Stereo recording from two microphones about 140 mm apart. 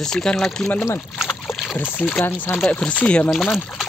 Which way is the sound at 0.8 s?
15° left (ahead or behind).